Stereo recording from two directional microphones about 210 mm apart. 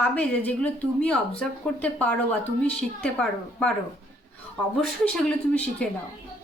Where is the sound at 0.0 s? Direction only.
5° left (ahead or behind).